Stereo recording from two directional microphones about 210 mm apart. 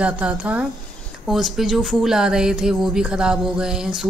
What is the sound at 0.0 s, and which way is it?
Speech, 5° right (ahead or behind).